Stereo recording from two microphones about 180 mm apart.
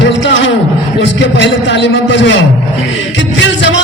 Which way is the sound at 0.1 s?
85° left.